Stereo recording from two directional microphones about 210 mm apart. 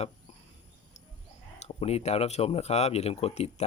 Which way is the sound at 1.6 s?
30° left (ahead or behind).